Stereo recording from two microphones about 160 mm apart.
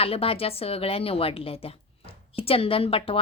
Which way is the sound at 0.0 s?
35° left (ahead or behind).